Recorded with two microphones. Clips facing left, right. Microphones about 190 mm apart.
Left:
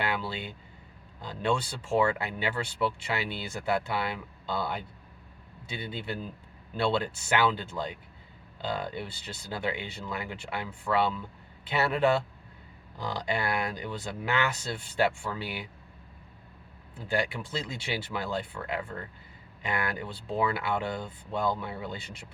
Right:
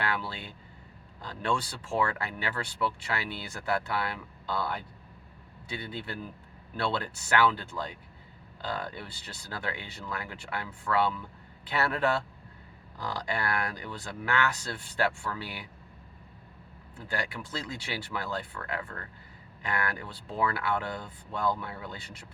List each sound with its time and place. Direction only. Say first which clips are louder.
0.0 s speech: left 2 dB; 20° left (ahead or behind)
17.1 s speech: left 5 dB; 25° left (ahead or behind)